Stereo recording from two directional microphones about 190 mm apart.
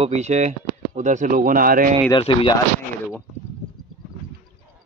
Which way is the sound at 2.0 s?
25° left (ahead or behind).